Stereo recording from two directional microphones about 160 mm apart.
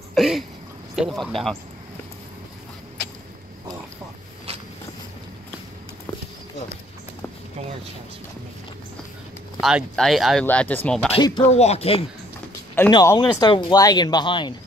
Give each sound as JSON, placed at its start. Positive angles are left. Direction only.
{"t": 0.1, "sound": "a sound", "side_deg": 0}
{"t": 0.9, "sound": "speech", "side_deg": 0}
{"t": 9.6, "sound": "speech", "side_deg": -5}
{"t": 11.1, "sound": "speech", "side_deg": 30}
{"t": 11.5, "sound": "speech", "side_deg": 40}
{"t": 12.9, "sound": "speech", "side_deg": 25}